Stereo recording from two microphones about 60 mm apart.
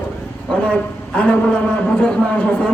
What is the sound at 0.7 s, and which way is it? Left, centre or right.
Speech, centre.